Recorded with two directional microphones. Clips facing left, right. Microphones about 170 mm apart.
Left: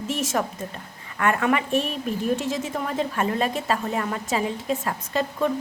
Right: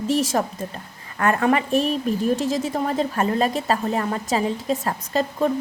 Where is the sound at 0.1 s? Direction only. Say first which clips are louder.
Right 4 dB; 35° right (ahead or behind).